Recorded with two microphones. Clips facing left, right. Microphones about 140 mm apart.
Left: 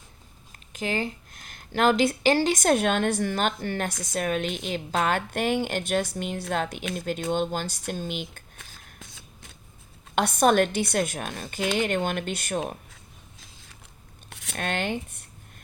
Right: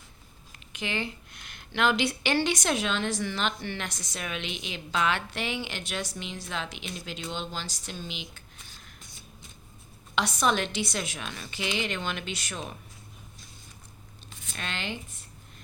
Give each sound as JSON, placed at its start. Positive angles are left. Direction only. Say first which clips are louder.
{"t": 0.7, "sound": "speech", "louder": "left 5 dB", "side_deg": 40}
{"t": 10.2, "sound": "speech", "louder": "left 6 dB", "side_deg": 50}
{"t": 14.3, "sound": "speech", "louder": "left 7 dB", "side_deg": 70}